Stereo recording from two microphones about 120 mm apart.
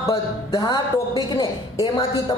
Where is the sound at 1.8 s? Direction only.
40° left (ahead or behind).